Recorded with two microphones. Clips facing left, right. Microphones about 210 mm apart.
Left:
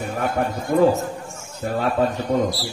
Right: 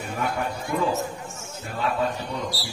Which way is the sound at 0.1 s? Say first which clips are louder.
Left 4 dB; 45° left (ahead or behind).